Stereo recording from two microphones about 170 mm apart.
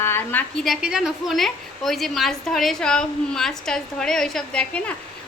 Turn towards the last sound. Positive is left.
turn(degrees=5)  # may be behind; listen again after turning